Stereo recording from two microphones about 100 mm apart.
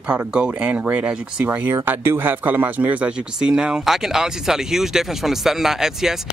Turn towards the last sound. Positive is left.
turn(degrees=-5)  # may be behind; listen again after turning